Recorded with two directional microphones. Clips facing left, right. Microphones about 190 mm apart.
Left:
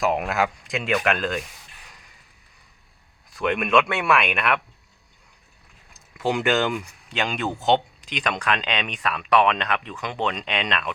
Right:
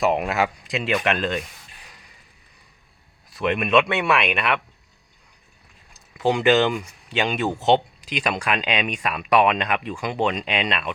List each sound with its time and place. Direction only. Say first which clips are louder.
0.0 s speech: right 2 dB; centre (ahead or behind)
3.2 s speech: right 1 dB; 5° right (ahead or behind)
6.1 s speech: right 4 dB; centre (ahead or behind)